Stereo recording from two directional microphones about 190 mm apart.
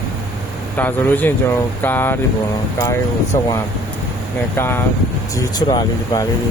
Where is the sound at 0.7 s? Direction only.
10° left (ahead or behind).